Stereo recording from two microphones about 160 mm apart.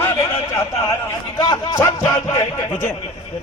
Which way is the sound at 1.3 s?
25° left (ahead or behind).